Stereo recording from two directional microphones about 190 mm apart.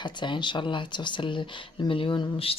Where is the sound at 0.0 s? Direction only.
25° left (ahead or behind).